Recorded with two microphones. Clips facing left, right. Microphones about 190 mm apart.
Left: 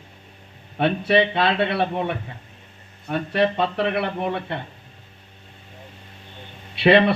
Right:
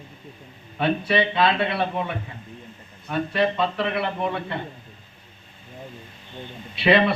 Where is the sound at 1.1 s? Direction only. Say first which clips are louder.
Left 3 dB; 65° left (ahead or behind).